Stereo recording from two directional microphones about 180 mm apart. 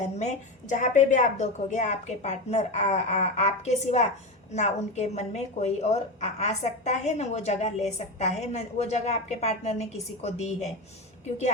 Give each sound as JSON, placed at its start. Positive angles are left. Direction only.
{"t": 0.2, "sound": "a woman's voice", "side_deg": 40}